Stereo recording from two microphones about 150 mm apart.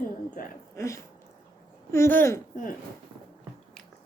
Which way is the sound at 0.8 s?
20° left (ahead or behind).